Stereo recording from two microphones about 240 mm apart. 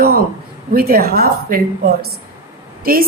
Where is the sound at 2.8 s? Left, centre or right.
Right.